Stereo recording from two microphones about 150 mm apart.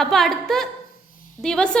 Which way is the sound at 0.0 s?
Centre (ahead or behind).